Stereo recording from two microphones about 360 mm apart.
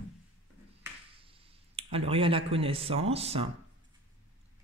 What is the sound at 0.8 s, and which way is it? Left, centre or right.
Finger snapping, centre.